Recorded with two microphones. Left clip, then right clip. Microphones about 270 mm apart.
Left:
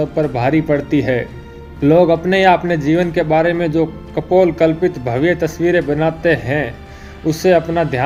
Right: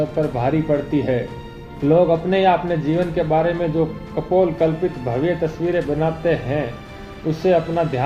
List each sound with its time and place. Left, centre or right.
0.2 s speech: left